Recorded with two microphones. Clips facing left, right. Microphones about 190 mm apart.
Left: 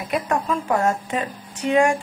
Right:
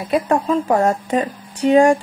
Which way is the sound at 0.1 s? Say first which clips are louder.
Right 6 dB; 35° right (ahead or behind).